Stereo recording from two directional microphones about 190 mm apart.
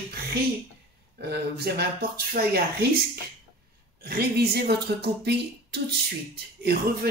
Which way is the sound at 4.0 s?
55° right (ahead or behind).